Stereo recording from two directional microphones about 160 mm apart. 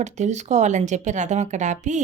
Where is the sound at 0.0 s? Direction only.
45° right (ahead or behind).